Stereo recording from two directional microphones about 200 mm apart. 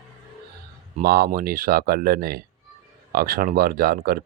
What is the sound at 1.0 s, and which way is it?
Speech, 50° right (ahead or behind).